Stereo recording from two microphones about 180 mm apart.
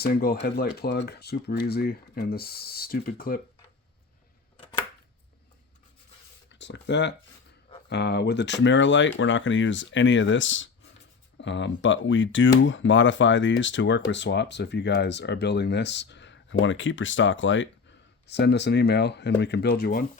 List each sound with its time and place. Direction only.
0.0 s speech: 55° left (ahead or behind)
4.5 s a sound: 30° left (ahead or behind)
6.5 s speech: 80° left
18.3 s speech: 70° left (ahead or behind)